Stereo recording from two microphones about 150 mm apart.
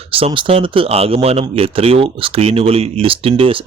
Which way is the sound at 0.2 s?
40° right (ahead or behind).